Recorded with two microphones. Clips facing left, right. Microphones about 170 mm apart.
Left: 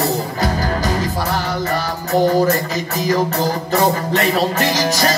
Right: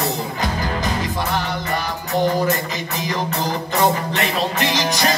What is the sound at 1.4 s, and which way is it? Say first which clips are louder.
Music: left 3 dB; 40° left (ahead or behind).